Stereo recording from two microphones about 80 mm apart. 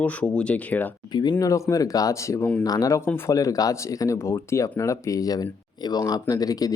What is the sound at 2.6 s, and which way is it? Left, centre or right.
Speech, left.